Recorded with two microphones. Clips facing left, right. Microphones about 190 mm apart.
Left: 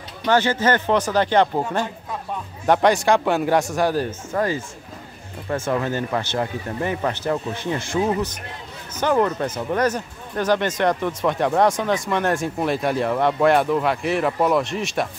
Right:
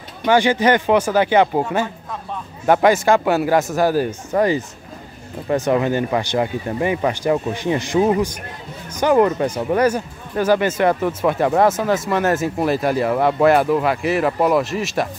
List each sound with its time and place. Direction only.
0.2 s speech: 15° right (ahead or behind)